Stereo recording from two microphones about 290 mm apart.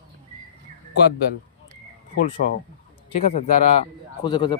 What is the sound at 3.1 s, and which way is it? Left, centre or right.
Speech, left.